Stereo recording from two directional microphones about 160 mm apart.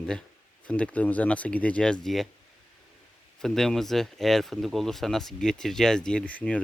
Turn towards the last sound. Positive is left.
turn(degrees=10)  # may be behind; listen again after turning